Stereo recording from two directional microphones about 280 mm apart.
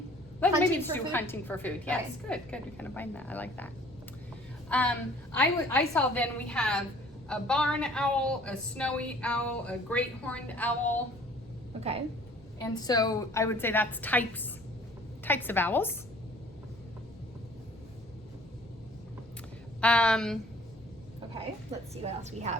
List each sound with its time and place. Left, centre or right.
0.3 s a woman's voice: centre
4.7 s a woman's voice: centre
12.6 s a woman's voice: centre
19.8 s a woman's voice: centre
21.9 s a woman's voice: right